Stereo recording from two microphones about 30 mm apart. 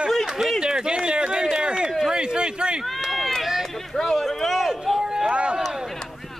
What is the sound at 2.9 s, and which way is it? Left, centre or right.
Run, centre.